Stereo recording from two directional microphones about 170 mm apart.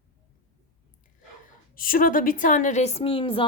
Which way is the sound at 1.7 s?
55° left (ahead or behind).